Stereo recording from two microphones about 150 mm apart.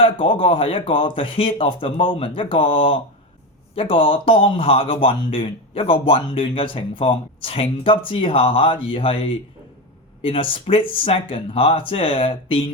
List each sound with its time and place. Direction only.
0.0 s speech: 35° left (ahead or behind)